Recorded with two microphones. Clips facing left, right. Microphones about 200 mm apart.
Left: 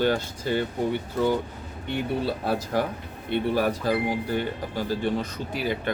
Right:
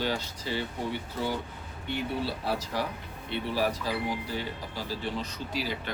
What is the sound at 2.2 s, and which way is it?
Speech, 50° left (ahead or behind).